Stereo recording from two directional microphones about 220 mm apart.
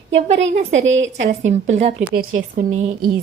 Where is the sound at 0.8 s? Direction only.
60° right (ahead or behind).